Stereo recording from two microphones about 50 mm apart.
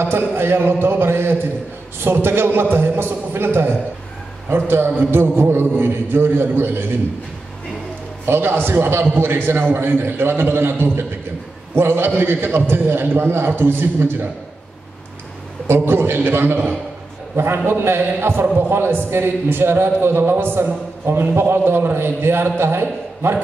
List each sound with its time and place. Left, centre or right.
0.0 s a man's voice: right
8.3 s a man's voice: right
15.7 s a man's voice: right
17.6 s a man's voice: right